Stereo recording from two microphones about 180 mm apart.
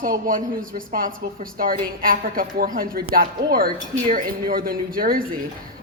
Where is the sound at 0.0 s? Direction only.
50° right (ahead or behind).